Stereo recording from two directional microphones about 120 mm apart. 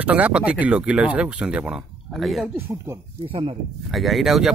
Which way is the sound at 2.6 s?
20° right (ahead or behind).